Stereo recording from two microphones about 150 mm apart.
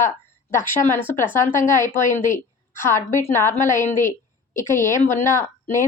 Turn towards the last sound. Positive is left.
turn(degrees=20)  # may be behind; listen again after turning